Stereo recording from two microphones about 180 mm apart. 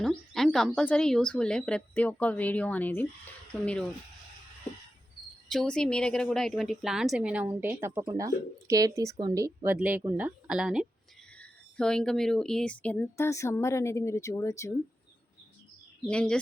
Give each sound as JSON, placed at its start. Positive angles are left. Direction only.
{"t": 0.0, "sound": "speech", "side_deg": 0}
{"t": 5.5, "sound": "a woman's voice", "side_deg": 5}
{"t": 9.7, "sound": "speech", "side_deg": -5}
{"t": 16.0, "sound": "a woman's voice", "side_deg": 5}